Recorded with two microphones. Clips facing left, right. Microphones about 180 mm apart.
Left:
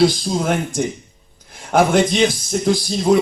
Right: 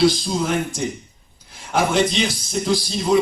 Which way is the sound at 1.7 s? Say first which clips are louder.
Left 4 dB; 50° left (ahead or behind).